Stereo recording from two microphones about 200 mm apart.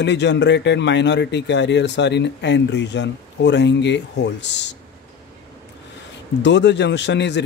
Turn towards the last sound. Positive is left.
turn(degrees=60)  # may be behind; listen again after turning